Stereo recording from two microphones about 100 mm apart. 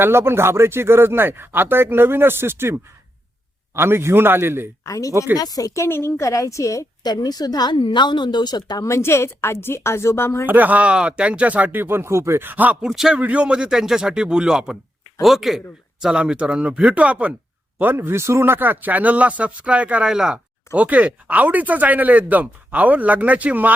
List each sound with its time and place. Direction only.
0.0 s speech: 25° right (ahead or behind)
4.9 s a woman's voice: 35° left (ahead or behind)
8.9 s a woman's voice: 25° left (ahead or behind)
10.4 s speech: 20° right (ahead or behind)
12.9 s speech: 5° right (ahead or behind)